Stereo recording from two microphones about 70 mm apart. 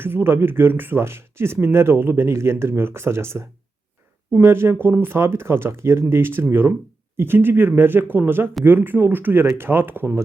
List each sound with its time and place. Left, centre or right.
0.0 s speech: right